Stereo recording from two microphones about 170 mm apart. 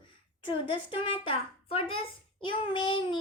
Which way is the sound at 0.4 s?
30° left (ahead or behind).